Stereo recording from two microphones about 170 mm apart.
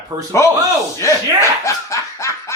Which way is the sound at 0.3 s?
15° left (ahead or behind).